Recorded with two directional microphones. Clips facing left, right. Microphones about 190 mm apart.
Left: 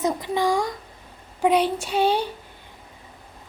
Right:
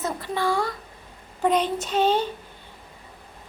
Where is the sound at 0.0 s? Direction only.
15° left (ahead or behind).